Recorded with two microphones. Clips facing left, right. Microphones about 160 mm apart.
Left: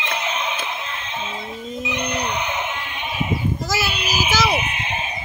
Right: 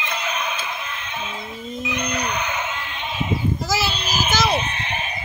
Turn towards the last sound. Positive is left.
turn(degrees=20)  # may be behind; listen again after turning